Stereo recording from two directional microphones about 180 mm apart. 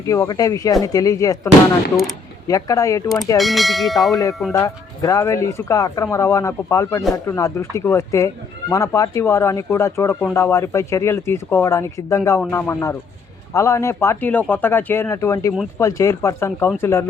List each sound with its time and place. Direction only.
0.0 s speech: 15° left (ahead or behind)
2.5 s speech: 20° left (ahead or behind)
3.3 s bell: centre (ahead or behind)
4.1 s speech: 20° left (ahead or behind)